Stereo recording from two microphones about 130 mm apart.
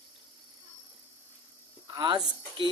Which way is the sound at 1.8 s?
30° right (ahead or behind).